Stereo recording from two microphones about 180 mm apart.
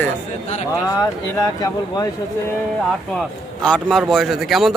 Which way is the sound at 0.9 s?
20° left (ahead or behind).